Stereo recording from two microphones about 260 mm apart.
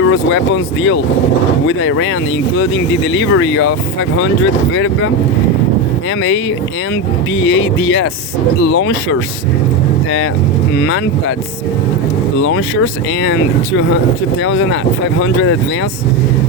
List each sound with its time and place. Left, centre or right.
0.1 s speech: left
3.1 s speech: left
7.4 s speech: left
10.8 s speech: left
12.4 s speech: left